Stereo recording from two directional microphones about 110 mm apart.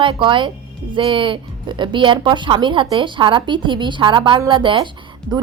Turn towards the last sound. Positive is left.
turn(degrees=-40)  # may be behind; listen again after turning